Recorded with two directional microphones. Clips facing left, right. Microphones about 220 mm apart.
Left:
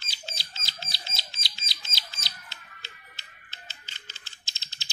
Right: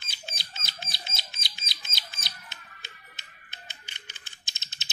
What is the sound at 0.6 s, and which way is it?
Bird, 20° left (ahead or behind).